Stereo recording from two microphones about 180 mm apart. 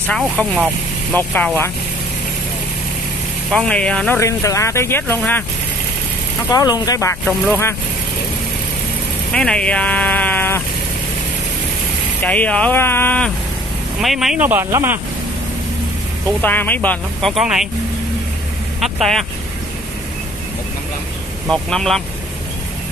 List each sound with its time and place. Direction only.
0.0 s speech: 5° left (ahead or behind)
3.5 s speech: 5° left (ahead or behind)
4.2 s speech: 15° left (ahead or behind)
6.5 s speech: 20° left (ahead or behind)
7.2 s speech: 10° left (ahead or behind)
9.3 s speech: 5° left (ahead or behind)
12.2 s speech: 10° left (ahead or behind)
14.0 s speech: centre (ahead or behind)
16.3 s speech: 10° left (ahead or behind)
18.8 s speech: centre (ahead or behind)
21.5 s speech: 5° left (ahead or behind)